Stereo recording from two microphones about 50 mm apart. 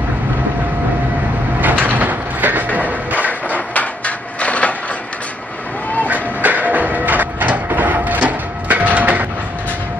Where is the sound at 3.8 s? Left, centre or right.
Left.